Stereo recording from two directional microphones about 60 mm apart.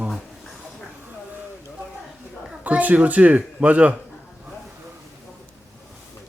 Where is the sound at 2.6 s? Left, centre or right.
Right.